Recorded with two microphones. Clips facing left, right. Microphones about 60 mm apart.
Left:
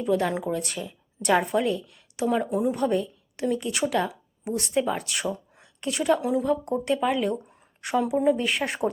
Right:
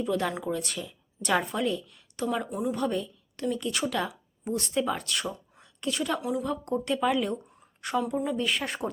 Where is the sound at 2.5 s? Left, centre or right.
Left.